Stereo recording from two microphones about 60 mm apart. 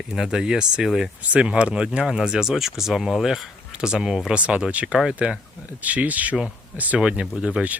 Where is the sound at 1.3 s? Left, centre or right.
Centre.